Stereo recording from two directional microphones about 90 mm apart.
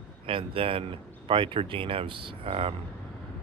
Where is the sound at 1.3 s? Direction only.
75° right (ahead or behind).